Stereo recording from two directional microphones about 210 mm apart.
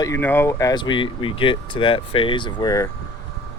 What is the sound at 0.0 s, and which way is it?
Speech, 10° left (ahead or behind).